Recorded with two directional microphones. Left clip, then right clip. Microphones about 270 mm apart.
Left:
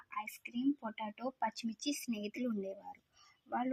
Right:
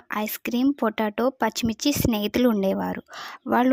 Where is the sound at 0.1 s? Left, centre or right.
Right.